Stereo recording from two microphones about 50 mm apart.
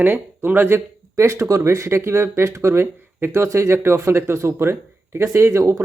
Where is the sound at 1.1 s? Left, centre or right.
Right.